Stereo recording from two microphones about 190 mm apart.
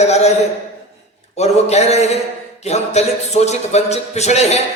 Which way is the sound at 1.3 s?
35° left (ahead or behind).